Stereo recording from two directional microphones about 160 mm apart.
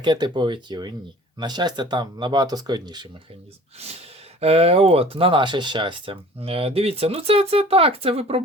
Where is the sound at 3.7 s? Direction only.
40° right (ahead or behind).